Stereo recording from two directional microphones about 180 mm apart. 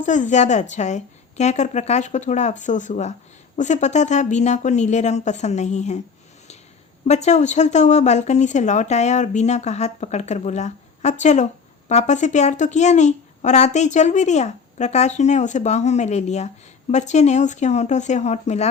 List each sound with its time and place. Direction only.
0.0 s a woman's voice: 45° left (ahead or behind)
7.1 s a woman's voice: 40° left (ahead or behind)